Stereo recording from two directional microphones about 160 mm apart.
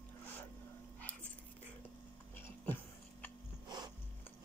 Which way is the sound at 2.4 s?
10° left (ahead or behind).